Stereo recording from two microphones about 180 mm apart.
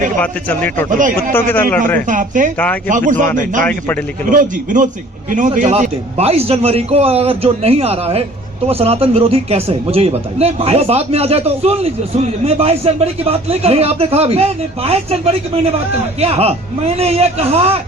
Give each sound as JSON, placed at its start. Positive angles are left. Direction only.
{"t": 0.2, "sound": "speech", "side_deg": 10}
{"t": 0.9, "sound": "a man's voice", "side_deg": -45}
{"t": 1.3, "sound": "speech", "side_deg": 10}
{"t": 2.0, "sound": "a man's voice", "side_deg": -45}
{"t": 3.6, "sound": "speech", "side_deg": 5}
{"t": 4.3, "sound": "a man's voice", "side_deg": -50}